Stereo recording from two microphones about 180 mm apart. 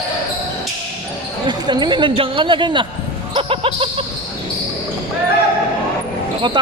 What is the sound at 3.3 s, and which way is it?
Basketball bounce, 30° right (ahead or behind).